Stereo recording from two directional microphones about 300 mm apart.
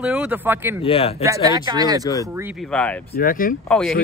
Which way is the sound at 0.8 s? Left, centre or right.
Centre.